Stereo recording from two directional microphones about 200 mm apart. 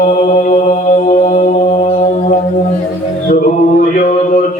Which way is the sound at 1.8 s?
30° left (ahead or behind).